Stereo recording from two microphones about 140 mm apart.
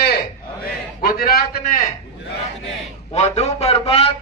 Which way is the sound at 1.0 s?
90° left.